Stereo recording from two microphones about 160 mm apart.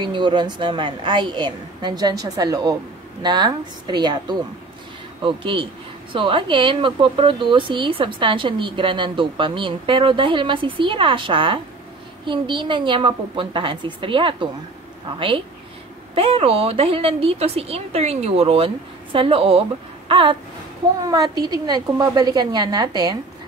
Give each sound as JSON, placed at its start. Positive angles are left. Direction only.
{"t": 0.0, "sound": "a woman's voice", "side_deg": -30}
{"t": 20.1, "sound": "a sound", "side_deg": -35}
{"t": 21.1, "sound": "a woman's voice", "side_deg": -25}